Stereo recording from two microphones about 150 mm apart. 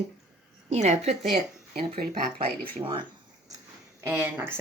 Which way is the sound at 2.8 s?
30° right (ahead or behind).